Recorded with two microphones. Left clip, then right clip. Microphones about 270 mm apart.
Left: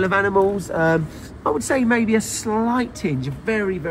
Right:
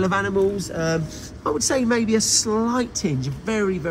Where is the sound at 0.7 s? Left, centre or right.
Centre.